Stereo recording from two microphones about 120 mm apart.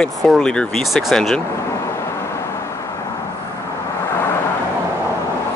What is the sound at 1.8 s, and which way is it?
Vehicle, 20° left (ahead or behind).